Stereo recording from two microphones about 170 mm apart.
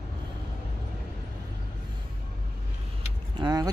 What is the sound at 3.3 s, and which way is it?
Vehicle, 25° right (ahead or behind).